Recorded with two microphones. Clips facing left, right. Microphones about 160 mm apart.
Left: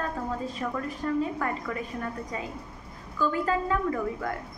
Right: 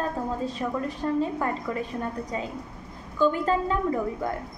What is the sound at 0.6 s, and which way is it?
A woman's voice, 20° right (ahead or behind).